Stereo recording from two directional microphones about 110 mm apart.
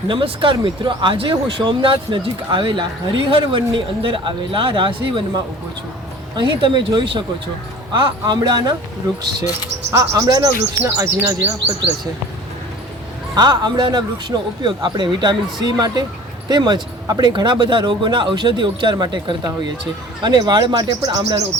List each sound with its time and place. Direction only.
0.1 s speech: 50° right (ahead or behind)
9.9 s speech: 30° right (ahead or behind)
10.8 s speech: 25° right (ahead or behind)
13.3 s speech: 40° right (ahead or behind)